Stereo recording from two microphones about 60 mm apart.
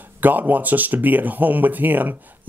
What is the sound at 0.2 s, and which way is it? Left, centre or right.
Speech, right.